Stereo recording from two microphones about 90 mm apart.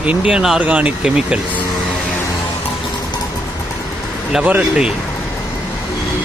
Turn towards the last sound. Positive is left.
turn(degrees=-15)  # may be behind; listen again after turning